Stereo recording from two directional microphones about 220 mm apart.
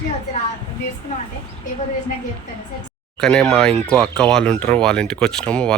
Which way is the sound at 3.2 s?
5° left (ahead or behind).